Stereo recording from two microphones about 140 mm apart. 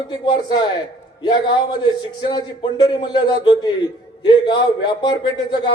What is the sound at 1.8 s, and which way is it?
Speech, 35° left (ahead or behind).